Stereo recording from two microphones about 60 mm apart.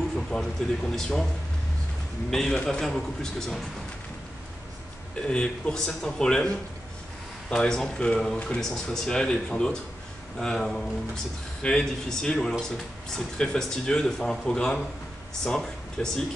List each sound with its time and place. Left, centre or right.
0.3 s speech: centre
2.3 s speech: centre
5.2 s speech: centre
7.5 s speech: centre